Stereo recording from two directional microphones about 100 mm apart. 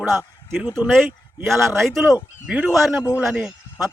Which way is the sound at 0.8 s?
15° right (ahead or behind).